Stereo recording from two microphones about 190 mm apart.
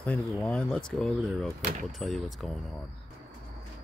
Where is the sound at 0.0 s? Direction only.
5° left (ahead or behind).